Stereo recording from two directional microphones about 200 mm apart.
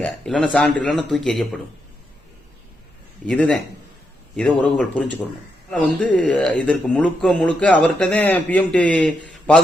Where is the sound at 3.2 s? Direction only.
5° left (ahead or behind).